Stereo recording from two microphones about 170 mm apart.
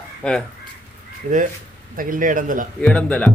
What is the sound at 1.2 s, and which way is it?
A man's voice, 50° right (ahead or behind).